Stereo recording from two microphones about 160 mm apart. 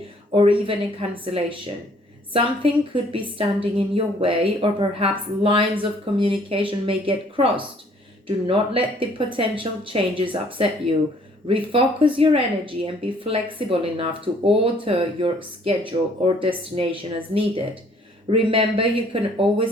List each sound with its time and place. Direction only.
0.3 s a woman's voice: 35° right (ahead or behind)